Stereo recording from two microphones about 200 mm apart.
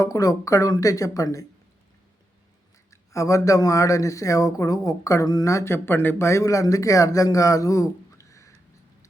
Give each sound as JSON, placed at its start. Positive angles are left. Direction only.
{"t": 0.0, "sound": "speech", "side_deg": 15}
{"t": 2.9, "sound": "speech", "side_deg": 15}